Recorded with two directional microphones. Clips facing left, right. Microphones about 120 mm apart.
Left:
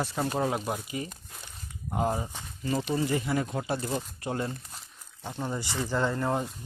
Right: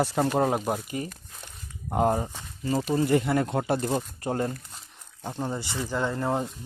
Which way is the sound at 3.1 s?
60° right (ahead or behind).